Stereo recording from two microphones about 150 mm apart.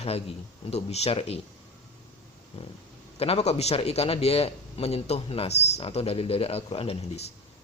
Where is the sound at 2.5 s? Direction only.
45° left (ahead or behind).